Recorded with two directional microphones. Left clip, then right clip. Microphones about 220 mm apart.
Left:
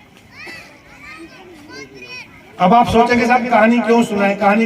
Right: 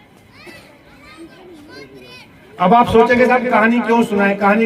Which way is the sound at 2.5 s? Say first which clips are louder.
Even; 45° left (ahead or behind).